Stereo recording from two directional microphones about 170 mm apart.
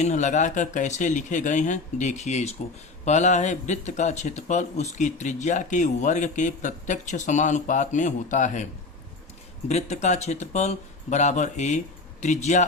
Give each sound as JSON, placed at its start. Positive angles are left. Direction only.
{"t": 0.0, "sound": "speech", "side_deg": 45}
{"t": 9.6, "sound": "speech", "side_deg": 40}